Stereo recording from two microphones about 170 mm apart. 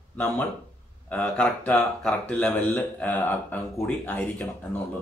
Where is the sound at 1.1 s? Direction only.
5° left (ahead or behind).